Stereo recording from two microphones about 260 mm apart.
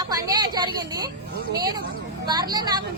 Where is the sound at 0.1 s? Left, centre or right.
Centre.